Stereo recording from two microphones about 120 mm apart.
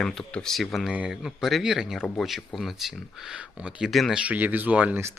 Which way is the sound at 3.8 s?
Centre (ahead or behind).